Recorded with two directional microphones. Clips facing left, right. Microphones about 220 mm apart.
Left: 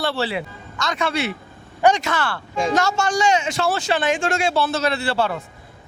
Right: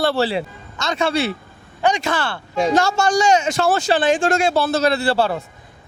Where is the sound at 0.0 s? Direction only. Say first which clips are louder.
Right 5 dB; 40° right (ahead or behind).